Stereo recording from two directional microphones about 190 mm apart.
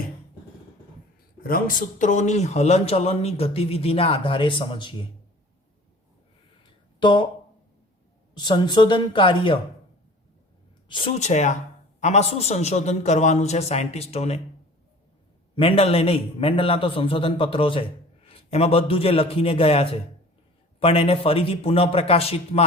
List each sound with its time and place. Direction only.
1.5 s speech: 50° left (ahead or behind); by 5.0 s 25° left (ahead or behind)
7.0 s speech: 25° left (ahead or behind)
8.4 s a man's voice: 25° left (ahead or behind)
10.8 s speech: 25° left (ahead or behind)
15.5 s a man's voice: 30° left (ahead or behind)